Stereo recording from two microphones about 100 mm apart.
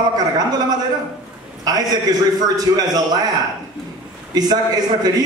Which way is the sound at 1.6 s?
40° right (ahead or behind).